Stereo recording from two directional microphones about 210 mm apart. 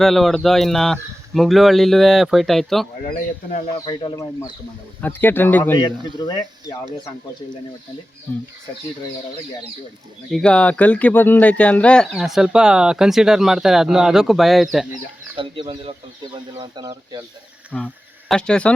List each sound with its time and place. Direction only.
0.0 s speech: centre (ahead or behind)
3.8 s speech: 20° left (ahead or behind)
10.3 s speech: 5° left (ahead or behind)
15.4 s speech: 25° right (ahead or behind)
17.7 s speech: 5° left (ahead or behind)